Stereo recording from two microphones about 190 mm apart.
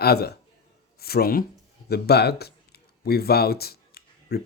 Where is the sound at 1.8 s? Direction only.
55° left (ahead or behind).